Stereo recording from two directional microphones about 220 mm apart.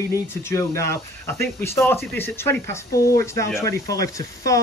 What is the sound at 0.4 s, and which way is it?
Speech, 10° left (ahead or behind).